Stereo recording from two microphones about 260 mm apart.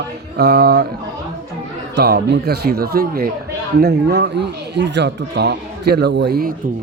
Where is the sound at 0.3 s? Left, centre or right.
Right.